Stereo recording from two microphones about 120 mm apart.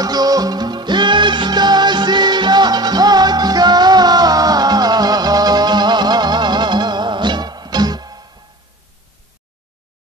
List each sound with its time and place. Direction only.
0.0 s music: 30° right (ahead or behind)